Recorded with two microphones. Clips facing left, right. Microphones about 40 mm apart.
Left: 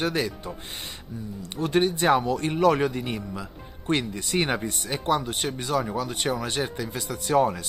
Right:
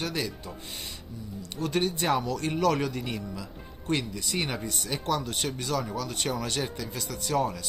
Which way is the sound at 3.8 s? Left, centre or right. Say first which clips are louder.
Left 3 dB; left.